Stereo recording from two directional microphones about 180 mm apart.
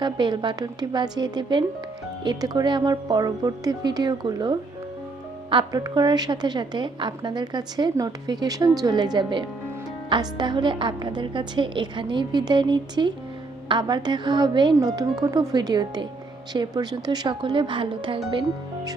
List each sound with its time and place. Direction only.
0.0 s a woman's voice: 25° right (ahead or behind)